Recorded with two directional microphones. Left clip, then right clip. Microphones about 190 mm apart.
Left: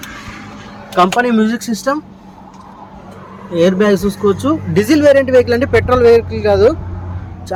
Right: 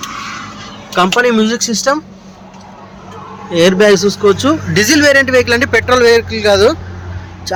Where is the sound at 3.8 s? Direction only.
15° right (ahead or behind).